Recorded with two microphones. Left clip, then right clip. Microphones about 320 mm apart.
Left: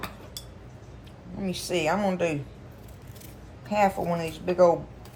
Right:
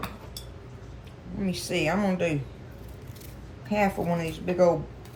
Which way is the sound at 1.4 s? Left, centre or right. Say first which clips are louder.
Left 1 dB; centre.